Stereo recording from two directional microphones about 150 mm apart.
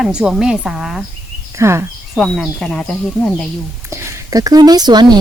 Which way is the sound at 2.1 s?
Centre (ahead or behind).